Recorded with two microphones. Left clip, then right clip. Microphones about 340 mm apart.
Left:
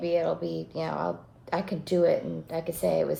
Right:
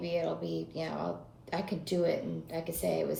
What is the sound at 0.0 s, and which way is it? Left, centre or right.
A woman's voice, centre.